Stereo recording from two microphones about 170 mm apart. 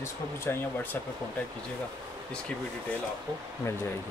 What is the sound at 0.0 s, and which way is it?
Speech, 15° left (ahead or behind).